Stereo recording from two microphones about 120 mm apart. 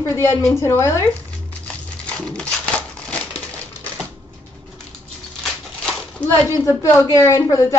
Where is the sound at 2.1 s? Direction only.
5° left (ahead or behind).